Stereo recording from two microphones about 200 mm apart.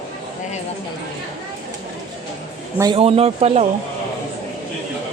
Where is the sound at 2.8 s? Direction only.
25° right (ahead or behind).